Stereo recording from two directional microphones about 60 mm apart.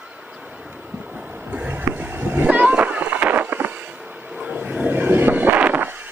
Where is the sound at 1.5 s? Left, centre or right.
Right.